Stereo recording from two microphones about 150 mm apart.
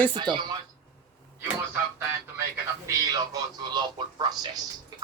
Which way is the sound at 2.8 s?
25° right (ahead or behind).